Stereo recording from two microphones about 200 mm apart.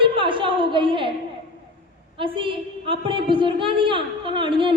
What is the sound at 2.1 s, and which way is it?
A woman's voice, 25° right (ahead or behind).